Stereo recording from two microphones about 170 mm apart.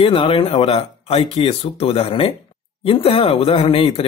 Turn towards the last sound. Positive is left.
turn(degrees=35)  # may be behind; listen again after turning